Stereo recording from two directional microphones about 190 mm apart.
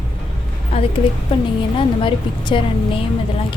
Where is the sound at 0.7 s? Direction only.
30° left (ahead or behind).